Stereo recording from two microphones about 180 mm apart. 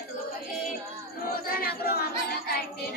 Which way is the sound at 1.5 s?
55° left (ahead or behind).